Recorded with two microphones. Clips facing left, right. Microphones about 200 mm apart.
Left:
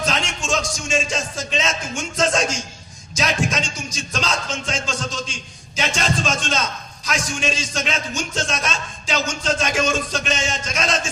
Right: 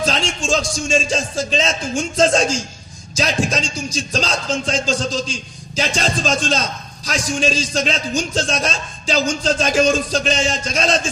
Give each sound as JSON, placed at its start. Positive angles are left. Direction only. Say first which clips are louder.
{"t": 0.0, "sound": "speech", "louder": "right 4 dB", "side_deg": -30}